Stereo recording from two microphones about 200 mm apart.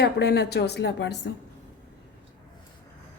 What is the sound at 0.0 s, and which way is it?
A woman's voice, 55° left (ahead or behind).